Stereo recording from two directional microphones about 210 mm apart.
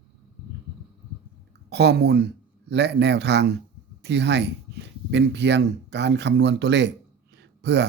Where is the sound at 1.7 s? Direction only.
55° right (ahead or behind).